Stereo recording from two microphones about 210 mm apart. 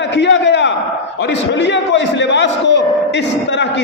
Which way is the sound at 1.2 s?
55° left (ahead or behind).